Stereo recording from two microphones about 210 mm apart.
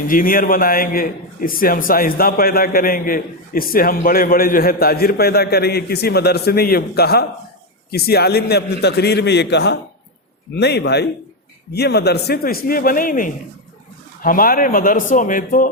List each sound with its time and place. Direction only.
0.1 s a man's voice: 40° left (ahead or behind)